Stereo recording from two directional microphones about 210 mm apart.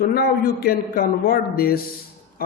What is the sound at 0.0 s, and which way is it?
A man's voice, 45° left (ahead or behind).